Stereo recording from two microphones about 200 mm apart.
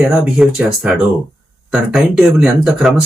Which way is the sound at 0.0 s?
5° right (ahead or behind).